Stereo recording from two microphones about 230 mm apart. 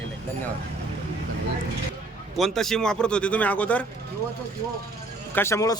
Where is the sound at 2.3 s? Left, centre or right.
Centre.